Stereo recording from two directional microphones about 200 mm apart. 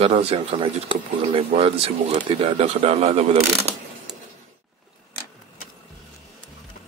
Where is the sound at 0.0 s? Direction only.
30° right (ahead or behind).